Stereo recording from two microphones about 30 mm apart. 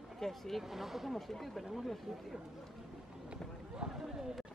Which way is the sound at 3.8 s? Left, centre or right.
Right.